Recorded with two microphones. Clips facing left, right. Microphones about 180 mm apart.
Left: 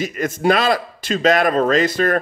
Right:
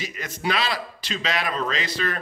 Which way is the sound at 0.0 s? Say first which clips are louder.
Left 10 dB; 50° left (ahead or behind).